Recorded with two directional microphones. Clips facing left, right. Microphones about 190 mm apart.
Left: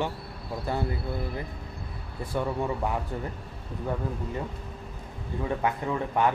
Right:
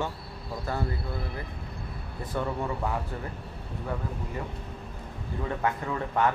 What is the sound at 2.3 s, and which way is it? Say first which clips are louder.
Speech: left 2 dB; 15° left (ahead or behind).